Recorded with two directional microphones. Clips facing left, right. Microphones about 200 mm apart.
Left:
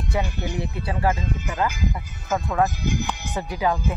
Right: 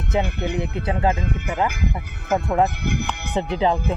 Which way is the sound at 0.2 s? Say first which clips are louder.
Right 4 dB; 60° right (ahead or behind).